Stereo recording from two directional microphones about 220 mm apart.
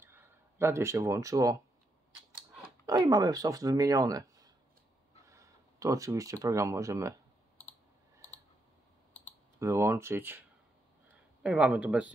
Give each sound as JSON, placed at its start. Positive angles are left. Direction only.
{"t": 0.0, "sound": "speech", "side_deg": -10}
{"t": 2.9, "sound": "speech", "side_deg": -15}
{"t": 9.6, "sound": "speech", "side_deg": -10}
{"t": 11.4, "sound": "speech", "side_deg": -5}